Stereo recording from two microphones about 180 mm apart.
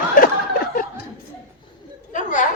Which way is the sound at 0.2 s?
50° left (ahead or behind).